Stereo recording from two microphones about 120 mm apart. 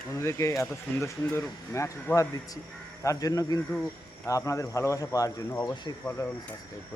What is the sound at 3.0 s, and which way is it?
Speech, 30° left (ahead or behind).